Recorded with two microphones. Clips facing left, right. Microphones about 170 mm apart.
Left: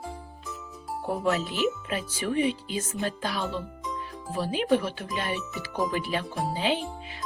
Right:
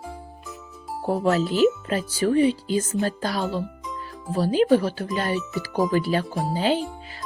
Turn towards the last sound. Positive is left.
turn(degrees=-40)  # may be behind; listen again after turning